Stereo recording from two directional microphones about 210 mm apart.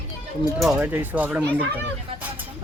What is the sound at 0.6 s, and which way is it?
Speech, 5° right (ahead or behind).